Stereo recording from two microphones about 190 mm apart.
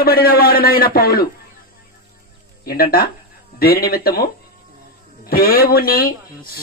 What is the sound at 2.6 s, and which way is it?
Speech, 55° left (ahead or behind).